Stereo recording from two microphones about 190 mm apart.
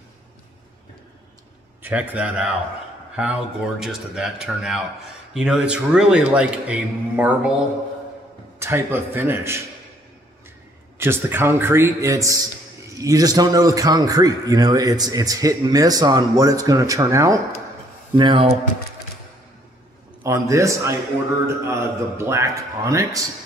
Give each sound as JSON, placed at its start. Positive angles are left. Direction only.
{"t": 1.8, "sound": "a man's voice", "side_deg": -10}
{"t": 8.5, "sound": "a man's voice", "side_deg": -10}
{"t": 11.0, "sound": "a man's voice", "side_deg": -10}
{"t": 18.1, "sound": "a man's voice", "side_deg": -25}
{"t": 20.2, "sound": "a man's voice", "side_deg": -15}